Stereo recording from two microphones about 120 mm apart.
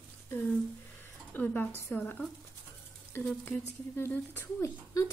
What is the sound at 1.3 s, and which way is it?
Speech, 15° left (ahead or behind).